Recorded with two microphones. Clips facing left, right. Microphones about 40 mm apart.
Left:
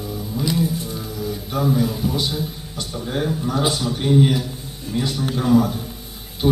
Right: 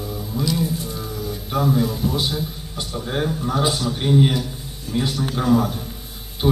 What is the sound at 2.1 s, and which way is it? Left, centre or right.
A man's voice, centre.